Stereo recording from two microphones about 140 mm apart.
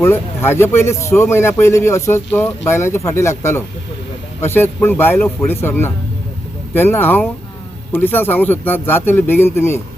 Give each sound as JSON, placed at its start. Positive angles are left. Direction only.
{"t": 0.0, "sound": "a man's voice", "side_deg": 15}